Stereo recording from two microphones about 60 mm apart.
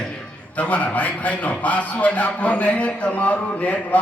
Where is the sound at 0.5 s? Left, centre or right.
Left.